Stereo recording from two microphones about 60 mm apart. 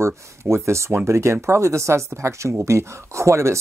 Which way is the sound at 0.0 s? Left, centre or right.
Right.